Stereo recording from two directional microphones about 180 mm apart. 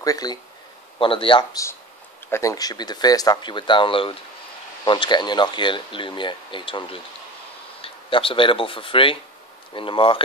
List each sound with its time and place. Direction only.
0.0 s speech: 20° left (ahead or behind)